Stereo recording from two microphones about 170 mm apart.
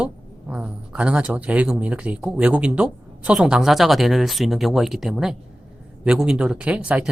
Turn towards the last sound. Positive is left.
turn(degrees=-5)  # may be behind; listen again after turning